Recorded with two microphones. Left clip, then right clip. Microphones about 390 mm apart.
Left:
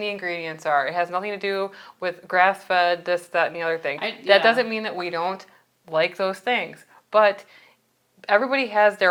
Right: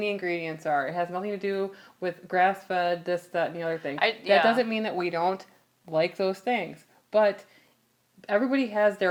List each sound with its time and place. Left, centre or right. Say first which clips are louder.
0.0 s speech: left 2 dB; left
0.7 s a woman's voice: left 6 dB; left